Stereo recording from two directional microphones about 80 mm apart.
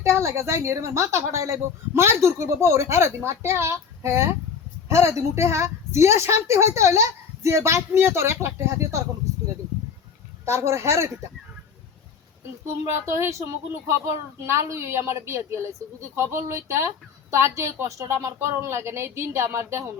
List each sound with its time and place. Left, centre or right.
0.0 s speech: right
10.4 s speech: right
13.1 s speech: right